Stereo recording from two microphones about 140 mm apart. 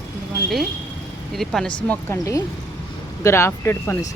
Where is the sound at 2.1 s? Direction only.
25° left (ahead or behind).